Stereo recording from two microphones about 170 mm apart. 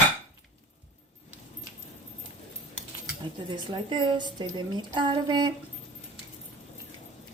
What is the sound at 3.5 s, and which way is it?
A woman's voice, 30° right (ahead or behind).